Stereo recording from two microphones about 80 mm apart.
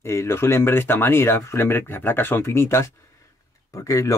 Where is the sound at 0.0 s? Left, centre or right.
Left.